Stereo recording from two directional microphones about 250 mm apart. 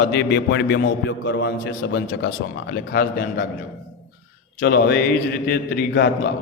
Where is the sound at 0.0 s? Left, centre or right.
Left.